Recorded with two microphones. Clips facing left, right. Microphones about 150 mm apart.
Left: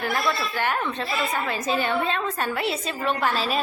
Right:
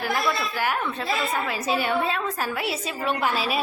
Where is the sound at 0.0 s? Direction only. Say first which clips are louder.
Even; 5° right (ahead or behind).